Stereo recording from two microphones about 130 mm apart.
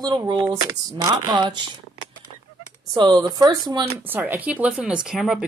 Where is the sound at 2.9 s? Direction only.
35° right (ahead or behind).